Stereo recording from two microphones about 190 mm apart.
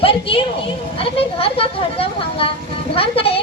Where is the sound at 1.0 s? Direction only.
30° left (ahead or behind).